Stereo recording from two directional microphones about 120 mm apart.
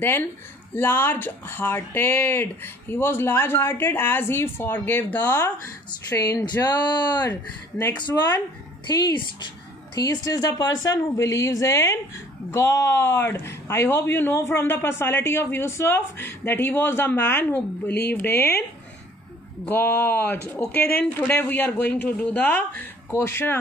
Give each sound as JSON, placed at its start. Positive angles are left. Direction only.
{"t": 0.7, "sound": "speech", "side_deg": 20}
{"t": 6.1, "sound": "speech", "side_deg": 30}
{"t": 8.8, "sound": "speech", "side_deg": 40}
{"t": 19.6, "sound": "speech", "side_deg": 15}